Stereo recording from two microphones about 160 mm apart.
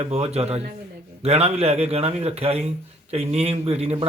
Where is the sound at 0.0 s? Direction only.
40° right (ahead or behind).